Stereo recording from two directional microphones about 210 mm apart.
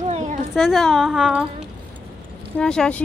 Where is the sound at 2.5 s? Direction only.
5° left (ahead or behind).